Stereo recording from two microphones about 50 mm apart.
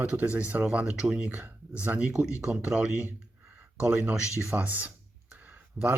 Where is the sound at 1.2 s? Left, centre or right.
Right.